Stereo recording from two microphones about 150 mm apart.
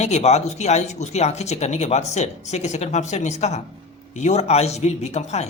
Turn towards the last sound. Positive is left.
turn(degrees=45)  # may be behind; listen again after turning